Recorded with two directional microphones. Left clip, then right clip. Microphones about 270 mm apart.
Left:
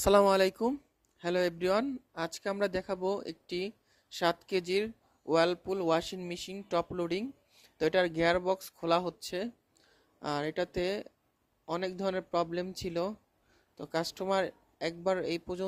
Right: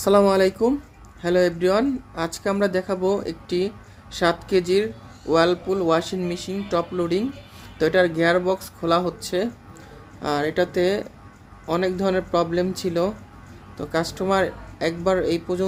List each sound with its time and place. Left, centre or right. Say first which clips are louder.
0.0 s speech: right 7 dB; left